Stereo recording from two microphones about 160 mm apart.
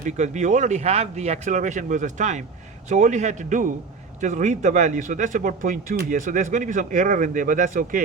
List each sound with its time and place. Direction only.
0.0 s speech: 50° right (ahead or behind)